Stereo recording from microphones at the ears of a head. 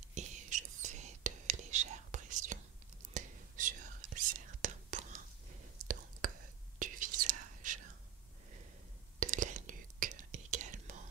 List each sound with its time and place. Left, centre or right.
0.1 s whispering: right
9.2 s whispering: right